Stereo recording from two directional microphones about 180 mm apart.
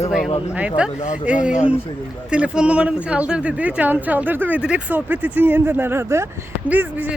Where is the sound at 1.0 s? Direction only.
40° left (ahead or behind).